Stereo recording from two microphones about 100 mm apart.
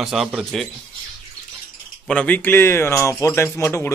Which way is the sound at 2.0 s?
15° left (ahead or behind).